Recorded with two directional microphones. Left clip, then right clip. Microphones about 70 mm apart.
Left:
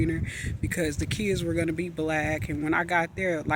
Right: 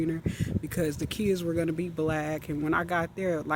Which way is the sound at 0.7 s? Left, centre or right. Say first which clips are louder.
Left 2 dB; right.